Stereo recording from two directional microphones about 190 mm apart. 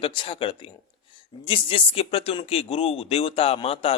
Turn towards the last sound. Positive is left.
turn(degrees=30)  # may be behind; listen again after turning